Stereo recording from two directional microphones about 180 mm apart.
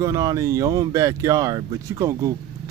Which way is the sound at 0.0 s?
20° right (ahead or behind).